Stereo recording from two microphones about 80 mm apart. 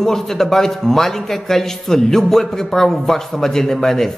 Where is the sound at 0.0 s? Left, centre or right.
Centre.